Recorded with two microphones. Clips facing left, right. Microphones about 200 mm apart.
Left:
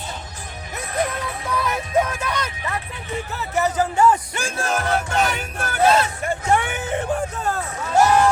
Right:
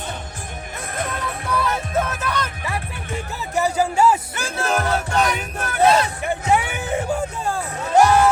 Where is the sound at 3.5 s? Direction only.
10° right (ahead or behind).